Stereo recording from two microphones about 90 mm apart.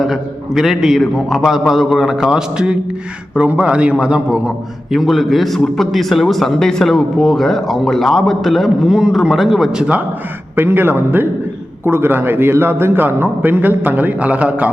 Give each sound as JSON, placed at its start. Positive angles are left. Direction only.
{"t": 0.0, "sound": "a man's voice", "side_deg": -5}
{"t": 10.5, "sound": "a man's voice", "side_deg": -25}